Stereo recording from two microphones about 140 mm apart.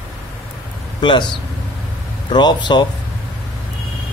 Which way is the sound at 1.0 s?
35° left (ahead or behind).